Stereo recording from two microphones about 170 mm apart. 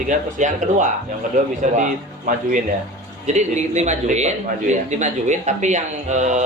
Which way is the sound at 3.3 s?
45° right (ahead or behind).